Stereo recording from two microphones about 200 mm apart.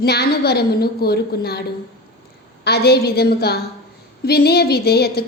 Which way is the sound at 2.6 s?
55° left (ahead or behind).